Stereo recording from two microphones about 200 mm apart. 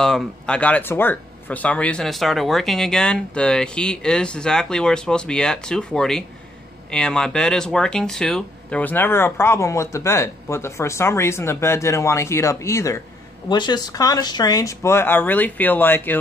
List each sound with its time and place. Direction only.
0.0 s speech: centre (ahead or behind)